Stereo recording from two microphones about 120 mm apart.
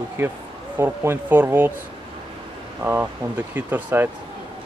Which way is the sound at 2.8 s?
15° right (ahead or behind).